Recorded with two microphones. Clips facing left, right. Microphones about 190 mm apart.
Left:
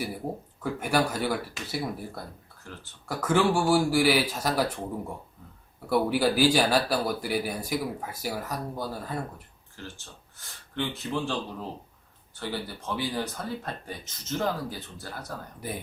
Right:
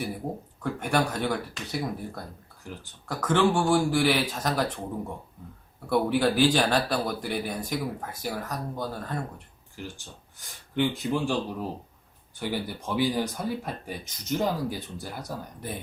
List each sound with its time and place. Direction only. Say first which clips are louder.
0.6 s speech: even; 5° left (ahead or behind)
2.7 s speech: right 4 dB; 15° right (ahead or behind)
3.1 s speech: right 1 dB; 10° left (ahead or behind)
5.9 s speech: even; 5° left (ahead or behind)
10.3 s speech: right 5 dB; 15° right (ahead or behind)